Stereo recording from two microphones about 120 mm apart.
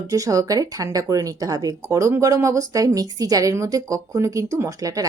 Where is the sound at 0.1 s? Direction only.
30° right (ahead or behind).